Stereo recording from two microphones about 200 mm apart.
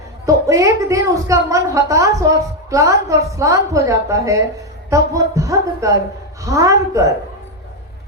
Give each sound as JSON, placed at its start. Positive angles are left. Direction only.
{"t": 0.3, "sound": "a woman's voice", "side_deg": -15}